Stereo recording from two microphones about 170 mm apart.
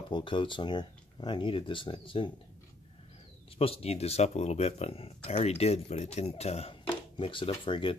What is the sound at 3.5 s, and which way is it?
Speech, 35° left (ahead or behind).